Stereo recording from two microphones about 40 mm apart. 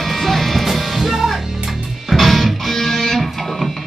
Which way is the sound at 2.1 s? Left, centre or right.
Centre.